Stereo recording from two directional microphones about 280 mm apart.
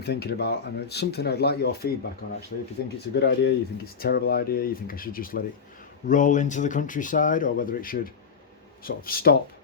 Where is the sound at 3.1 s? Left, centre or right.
Left.